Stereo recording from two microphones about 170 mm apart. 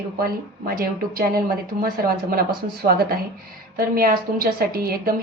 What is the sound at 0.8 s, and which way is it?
A woman's voice, 60° right (ahead or behind).